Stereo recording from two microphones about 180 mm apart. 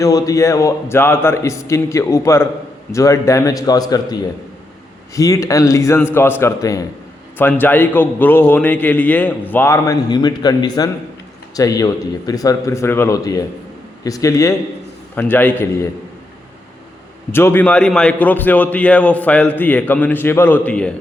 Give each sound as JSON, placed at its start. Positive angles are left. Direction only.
{"t": 0.0, "sound": "a man's voice", "side_deg": 20}
{"t": 17.3, "sound": "a man's voice", "side_deg": 15}